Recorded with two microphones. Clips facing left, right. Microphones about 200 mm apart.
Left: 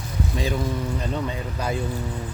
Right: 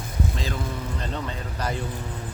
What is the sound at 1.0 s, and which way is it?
Speech, 10° left (ahead or behind).